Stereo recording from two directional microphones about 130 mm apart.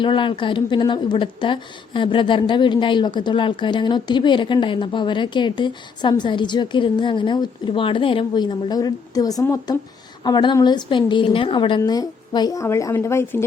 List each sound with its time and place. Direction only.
0.0 s a woman's voice: 40° left (ahead or behind)
11.8 s speech: 30° left (ahead or behind)